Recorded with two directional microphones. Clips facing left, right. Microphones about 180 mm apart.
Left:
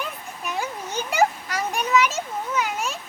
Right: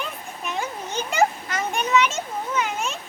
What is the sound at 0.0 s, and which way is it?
Children playing, 5° left (ahead or behind).